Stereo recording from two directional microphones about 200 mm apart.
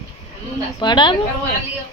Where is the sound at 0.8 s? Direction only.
20° left (ahead or behind).